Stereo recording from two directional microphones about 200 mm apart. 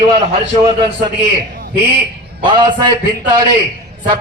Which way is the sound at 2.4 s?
25° right (ahead or behind).